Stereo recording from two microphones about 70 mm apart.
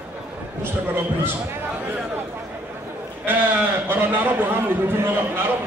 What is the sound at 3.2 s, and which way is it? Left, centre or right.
A man's voice, right.